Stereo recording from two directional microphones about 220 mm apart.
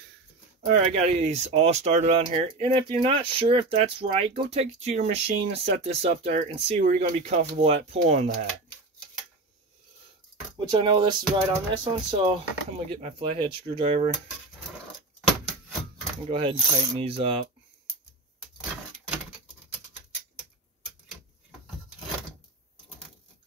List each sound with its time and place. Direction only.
0.6 s speech: 30° right (ahead or behind)
10.7 s speech: 20° right (ahead or behind)
16.3 s speech: 25° right (ahead or behind)